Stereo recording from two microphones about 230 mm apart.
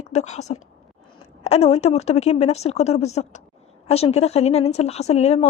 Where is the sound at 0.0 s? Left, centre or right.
Left.